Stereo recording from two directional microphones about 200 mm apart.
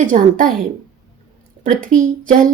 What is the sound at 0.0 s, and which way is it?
Speech, 40° right (ahead or behind).